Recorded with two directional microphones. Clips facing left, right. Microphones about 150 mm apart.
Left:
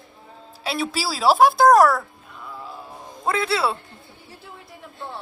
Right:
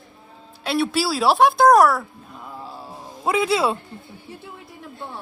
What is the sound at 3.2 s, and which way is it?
Speech, 15° right (ahead or behind).